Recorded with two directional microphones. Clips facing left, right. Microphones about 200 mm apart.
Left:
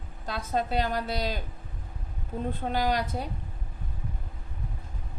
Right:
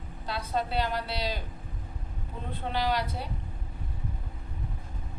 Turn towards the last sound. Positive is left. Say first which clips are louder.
# left 2 dB
turn(degrees=45)  # may be behind; listen again after turning